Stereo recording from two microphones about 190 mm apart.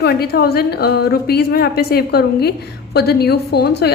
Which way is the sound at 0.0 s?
55° left (ahead or behind).